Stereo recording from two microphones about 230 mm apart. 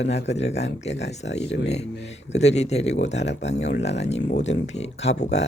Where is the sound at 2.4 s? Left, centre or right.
Left.